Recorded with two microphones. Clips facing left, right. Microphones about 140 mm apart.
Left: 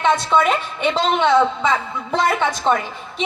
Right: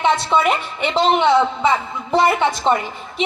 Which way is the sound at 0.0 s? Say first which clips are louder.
Even; 15° right (ahead or behind).